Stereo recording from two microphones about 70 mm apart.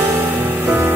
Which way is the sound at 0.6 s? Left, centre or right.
Right.